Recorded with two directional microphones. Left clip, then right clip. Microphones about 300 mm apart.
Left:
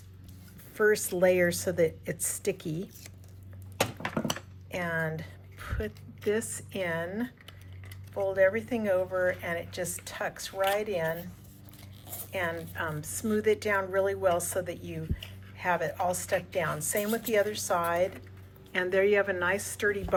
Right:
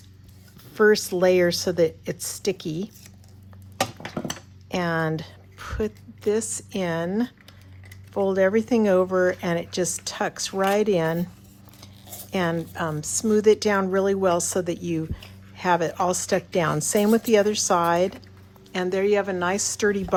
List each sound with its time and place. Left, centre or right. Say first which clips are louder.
0.7 s a woman's voice: right 7 dB; centre
4.7 s a woman's voice: right 7 dB; centre
12.3 s a woman's voice: right 7 dB; centre